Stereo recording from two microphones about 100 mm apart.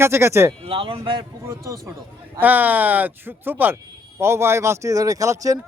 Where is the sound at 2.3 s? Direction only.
15° right (ahead or behind).